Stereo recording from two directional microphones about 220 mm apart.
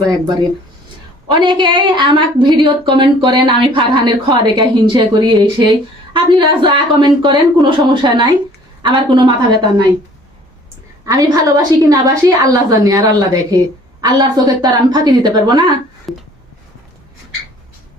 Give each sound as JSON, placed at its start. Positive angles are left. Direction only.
{"t": 1.3, "sound": "a woman's voice", "side_deg": -20}
{"t": 11.0, "sound": "a woman's voice", "side_deg": -15}
{"t": 16.1, "sound": "a sound", "side_deg": 0}